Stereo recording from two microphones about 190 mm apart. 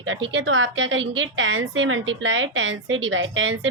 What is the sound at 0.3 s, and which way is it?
A woman's voice, 80° right.